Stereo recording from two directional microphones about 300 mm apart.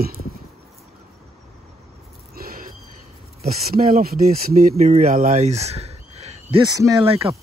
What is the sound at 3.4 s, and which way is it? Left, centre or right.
Speech, right.